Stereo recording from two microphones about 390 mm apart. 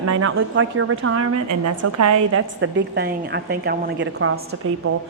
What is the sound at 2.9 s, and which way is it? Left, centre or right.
A woman's voice, right.